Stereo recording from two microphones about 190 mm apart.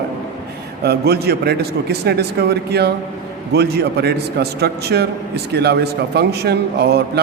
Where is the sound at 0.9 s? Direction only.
55° right (ahead or behind).